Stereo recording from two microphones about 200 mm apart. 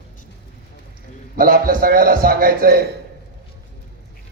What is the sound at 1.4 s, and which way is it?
A man's voice, 45° right (ahead or behind).